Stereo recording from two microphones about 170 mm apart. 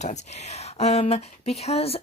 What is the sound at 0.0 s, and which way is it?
Speech, 40° left (ahead or behind).